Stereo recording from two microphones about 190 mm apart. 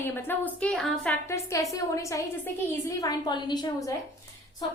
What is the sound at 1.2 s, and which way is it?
A woman's voice, 15° left (ahead or behind).